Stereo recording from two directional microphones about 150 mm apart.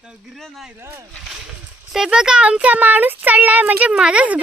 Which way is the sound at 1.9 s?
5° right (ahead or behind).